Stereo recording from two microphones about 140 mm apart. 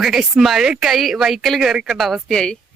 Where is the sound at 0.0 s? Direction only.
5° right (ahead or behind).